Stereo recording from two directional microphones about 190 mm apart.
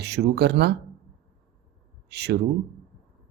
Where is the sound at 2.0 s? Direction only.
60° right (ahead or behind).